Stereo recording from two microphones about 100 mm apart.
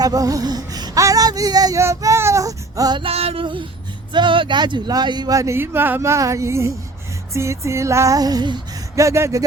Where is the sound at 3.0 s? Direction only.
80° right.